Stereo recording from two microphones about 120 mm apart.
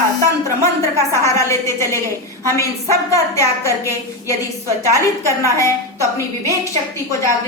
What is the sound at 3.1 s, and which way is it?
A woman's voice, 25° left (ahead or behind).